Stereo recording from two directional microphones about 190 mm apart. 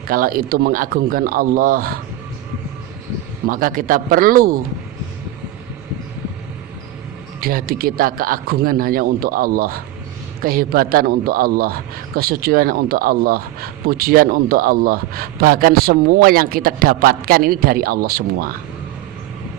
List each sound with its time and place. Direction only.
0.1 s a man's voice: 50° right (ahead or behind)
3.5 s a man's voice: 45° right (ahead or behind)
7.4 s a man's voice: 50° right (ahead or behind)